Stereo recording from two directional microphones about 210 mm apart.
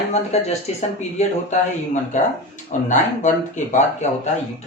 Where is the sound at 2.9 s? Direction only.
35° left (ahead or behind).